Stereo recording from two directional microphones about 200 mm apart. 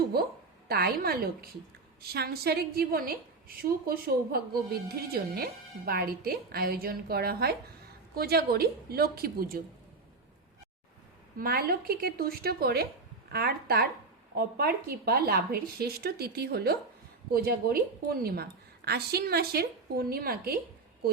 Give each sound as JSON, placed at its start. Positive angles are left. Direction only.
{"t": 0.1, "sound": "a woman's voice", "side_deg": -50}
{"t": 11.3, "sound": "a woman's voice", "side_deg": -50}
{"t": 18.9, "sound": "a woman's voice", "side_deg": -50}